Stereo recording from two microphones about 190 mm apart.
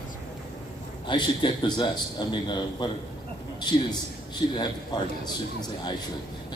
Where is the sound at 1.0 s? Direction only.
25° left (ahead or behind).